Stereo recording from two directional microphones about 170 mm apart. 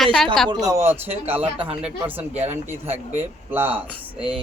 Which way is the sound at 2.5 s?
10° right (ahead or behind).